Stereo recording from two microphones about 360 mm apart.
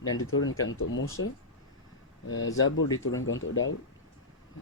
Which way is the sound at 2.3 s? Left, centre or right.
Left.